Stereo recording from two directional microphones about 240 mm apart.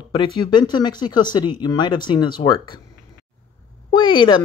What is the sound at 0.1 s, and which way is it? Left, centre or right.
Speech, centre.